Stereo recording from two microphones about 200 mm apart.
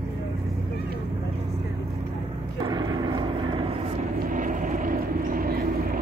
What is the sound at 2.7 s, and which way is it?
Vehicle, 20° right (ahead or behind).